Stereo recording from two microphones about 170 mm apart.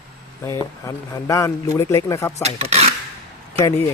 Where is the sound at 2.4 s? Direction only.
40° right (ahead or behind).